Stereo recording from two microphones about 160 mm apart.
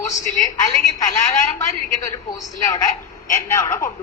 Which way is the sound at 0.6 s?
20° left (ahead or behind).